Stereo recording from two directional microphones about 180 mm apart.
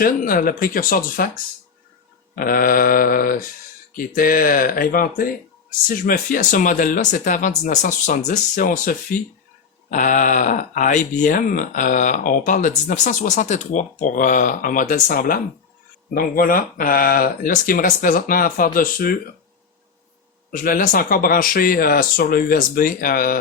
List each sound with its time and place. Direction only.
0.0 s speech: 50° left (ahead or behind)
2.3 s speech: 50° left (ahead or behind)
20.5 s speech: 45° left (ahead or behind)